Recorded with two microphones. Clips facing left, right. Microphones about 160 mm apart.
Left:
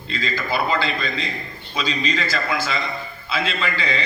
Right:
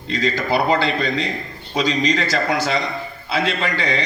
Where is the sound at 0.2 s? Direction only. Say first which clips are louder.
Right 4 dB; 70° right (ahead or behind).